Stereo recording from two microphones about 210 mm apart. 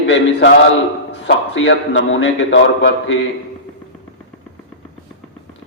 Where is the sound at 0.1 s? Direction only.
55° left (ahead or behind).